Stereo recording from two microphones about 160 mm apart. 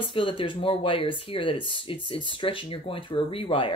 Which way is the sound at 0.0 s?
35° left (ahead or behind).